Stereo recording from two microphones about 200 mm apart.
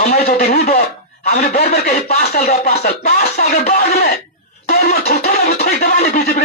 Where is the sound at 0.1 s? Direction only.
50° left (ahead or behind).